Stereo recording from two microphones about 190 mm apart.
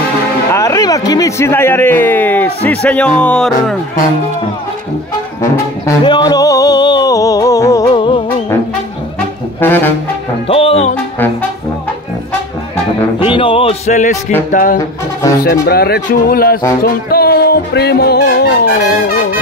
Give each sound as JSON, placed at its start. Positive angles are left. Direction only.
{"t": 0.5, "sound": "a man's voice", "side_deg": 15}
{"t": 5.4, "sound": "music", "side_deg": 20}
{"t": 9.6, "sound": "a man's voice", "side_deg": 10}
{"t": 10.5, "sound": "speech", "side_deg": 30}
{"t": 13.2, "sound": "speech", "side_deg": 30}
{"t": 16.8, "sound": "music", "side_deg": 55}